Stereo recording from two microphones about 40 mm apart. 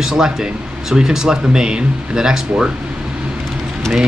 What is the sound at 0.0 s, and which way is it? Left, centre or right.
Speech, centre.